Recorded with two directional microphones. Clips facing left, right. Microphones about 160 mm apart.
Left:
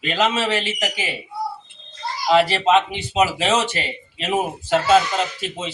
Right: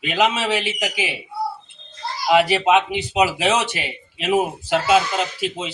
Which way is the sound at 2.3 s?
10° right (ahead or behind).